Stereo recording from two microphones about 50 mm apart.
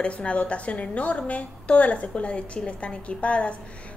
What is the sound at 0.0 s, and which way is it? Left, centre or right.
A woman's voice, left.